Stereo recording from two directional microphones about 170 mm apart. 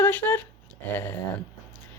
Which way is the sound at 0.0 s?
10° left (ahead or behind).